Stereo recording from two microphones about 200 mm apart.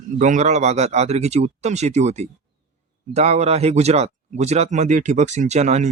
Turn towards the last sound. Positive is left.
turn(degrees=-35)  # may be behind; listen again after turning